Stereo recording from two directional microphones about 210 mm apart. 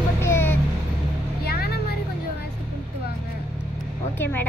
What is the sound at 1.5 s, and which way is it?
Vehicle, 50° left (ahead or behind).